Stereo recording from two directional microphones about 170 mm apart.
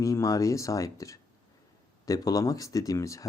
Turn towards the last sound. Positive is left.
turn(degrees=20)  # may be behind; listen again after turning